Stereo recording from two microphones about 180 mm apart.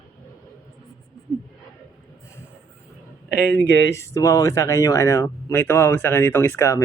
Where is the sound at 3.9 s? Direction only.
15° left (ahead or behind).